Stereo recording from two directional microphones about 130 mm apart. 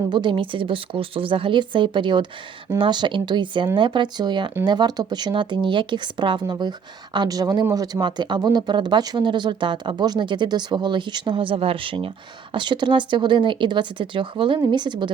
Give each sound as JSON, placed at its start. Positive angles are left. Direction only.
{"t": 0.1, "sound": "a woman's voice", "side_deg": -40}